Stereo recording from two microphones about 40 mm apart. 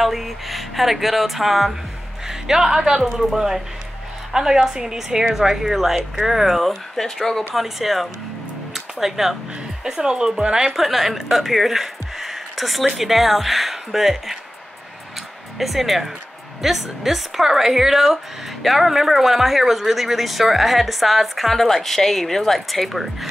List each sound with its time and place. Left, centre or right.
0.0 s a woman's voice: centre
7.5 s a woman's voice: centre
10.8 s a woman's voice: centre
15.5 s a woman's voice: centre